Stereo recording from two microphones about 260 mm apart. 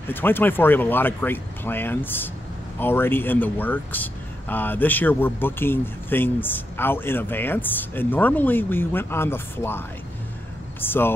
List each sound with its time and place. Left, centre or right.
0.1 s speech: centre